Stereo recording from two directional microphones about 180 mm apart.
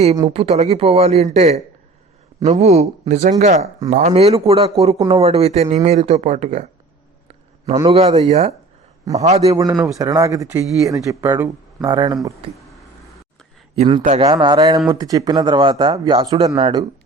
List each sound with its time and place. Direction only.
0.3 s speech: 35° right (ahead or behind)
3.8 s speech: 50° right (ahead or behind)
4.4 s speech: 30° right (ahead or behind)
7.9 s speech: 35° right (ahead or behind)
9.4 s speech: 20° right (ahead or behind)
13.7 s speech: 30° right (ahead or behind)